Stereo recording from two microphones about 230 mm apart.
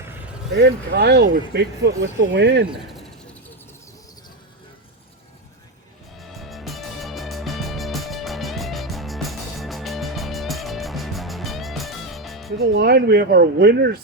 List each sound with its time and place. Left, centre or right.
0.5 s speech: right
2.6 s a sound: centre
6.1 s music: centre
12.5 s speech: right